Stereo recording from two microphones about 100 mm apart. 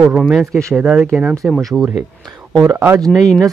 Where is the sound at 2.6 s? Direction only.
25° right (ahead or behind).